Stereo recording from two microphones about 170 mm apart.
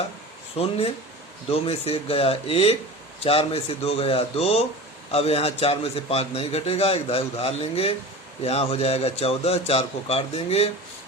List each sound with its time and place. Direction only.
0.5 s a man's voice: 35° left (ahead or behind)